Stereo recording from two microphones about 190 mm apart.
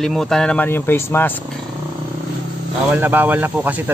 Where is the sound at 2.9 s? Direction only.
10° right (ahead or behind).